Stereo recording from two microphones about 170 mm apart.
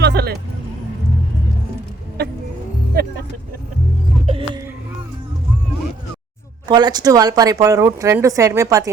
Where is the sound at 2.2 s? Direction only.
70° right (ahead or behind).